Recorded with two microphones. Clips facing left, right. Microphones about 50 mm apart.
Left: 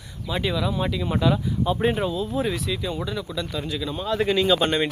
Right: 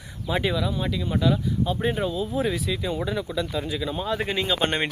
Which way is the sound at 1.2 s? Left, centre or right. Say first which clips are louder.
Left 1 dB; centre.